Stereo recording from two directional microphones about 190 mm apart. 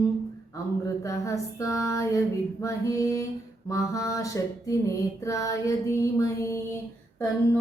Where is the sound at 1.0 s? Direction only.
15° left (ahead or behind).